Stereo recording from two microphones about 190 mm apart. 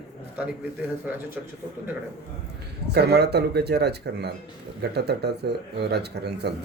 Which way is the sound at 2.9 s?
60° right (ahead or behind).